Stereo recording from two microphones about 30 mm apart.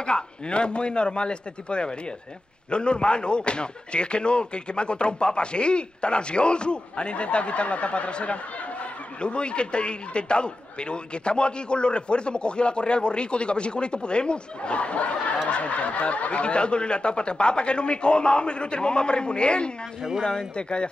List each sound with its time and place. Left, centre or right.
0.0 s a man's voice: left
20.0 s speech: centre
20.5 s a man's voice: left